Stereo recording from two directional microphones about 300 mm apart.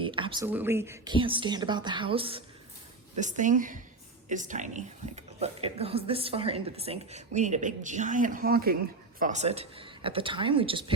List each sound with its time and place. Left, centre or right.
0.0 s a woman's voice: centre